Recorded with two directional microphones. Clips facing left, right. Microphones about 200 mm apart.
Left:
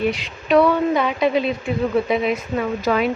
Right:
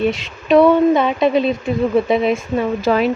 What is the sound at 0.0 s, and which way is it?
Speech, 25° right (ahead or behind).